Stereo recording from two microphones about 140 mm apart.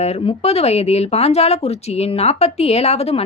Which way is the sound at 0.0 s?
50° left (ahead or behind).